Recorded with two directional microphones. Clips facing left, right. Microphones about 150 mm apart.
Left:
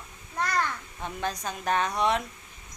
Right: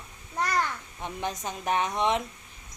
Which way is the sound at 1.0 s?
20° right (ahead or behind).